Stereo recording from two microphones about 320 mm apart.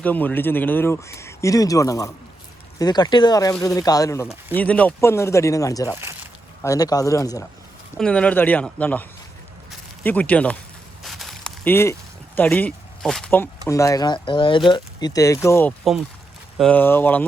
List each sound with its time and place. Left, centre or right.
0.0 s speech: centre
11.0 s a sound: centre
12.4 s speech: centre